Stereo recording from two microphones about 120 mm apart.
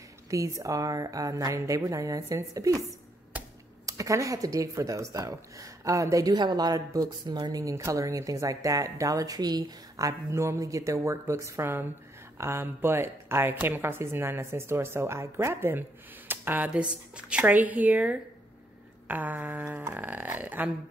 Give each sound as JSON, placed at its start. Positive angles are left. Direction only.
{"t": 0.3, "sound": "speech", "side_deg": -25}